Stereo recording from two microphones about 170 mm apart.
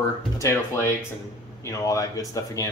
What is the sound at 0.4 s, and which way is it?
Speech, 15° left (ahead or behind).